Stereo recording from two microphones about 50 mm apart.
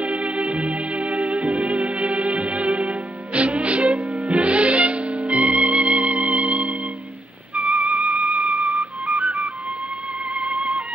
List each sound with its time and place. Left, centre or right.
0.0 s music: right
7.5 s flute: right
10.3 s music: right